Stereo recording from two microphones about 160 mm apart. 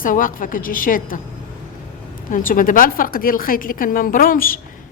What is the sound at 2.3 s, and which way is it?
A woman's voice, 60° left (ahead or behind).